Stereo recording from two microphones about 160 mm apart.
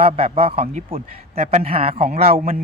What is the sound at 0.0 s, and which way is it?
Speech, 40° right (ahead or behind).